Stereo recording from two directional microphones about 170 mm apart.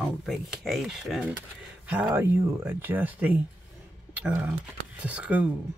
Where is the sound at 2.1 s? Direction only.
15° right (ahead or behind).